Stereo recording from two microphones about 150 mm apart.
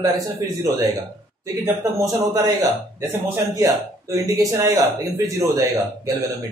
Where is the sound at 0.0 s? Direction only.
20° right (ahead or behind).